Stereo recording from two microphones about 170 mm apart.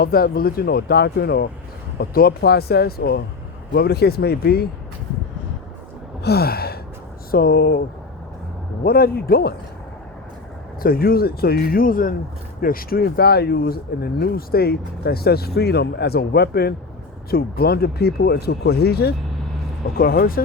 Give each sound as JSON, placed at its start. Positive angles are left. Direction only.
{"t": 0.0, "sound": "speech", "side_deg": 60}
{"t": 6.2, "sound": "speech", "side_deg": 65}
{"t": 8.8, "sound": "speech", "side_deg": 60}
{"t": 10.8, "sound": "speech", "side_deg": 60}